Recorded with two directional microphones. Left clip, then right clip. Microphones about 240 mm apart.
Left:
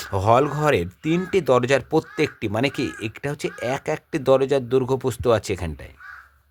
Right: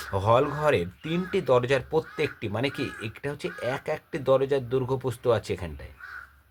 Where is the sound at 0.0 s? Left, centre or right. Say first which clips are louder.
Left 4 dB; left.